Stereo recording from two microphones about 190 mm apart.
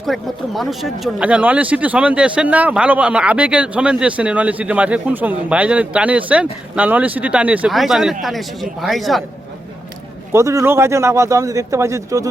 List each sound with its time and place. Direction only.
0.0 s speech: centre (ahead or behind)
10.3 s speech: 15° right (ahead or behind)